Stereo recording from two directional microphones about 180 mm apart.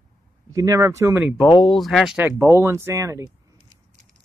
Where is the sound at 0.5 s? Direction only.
20° right (ahead or behind).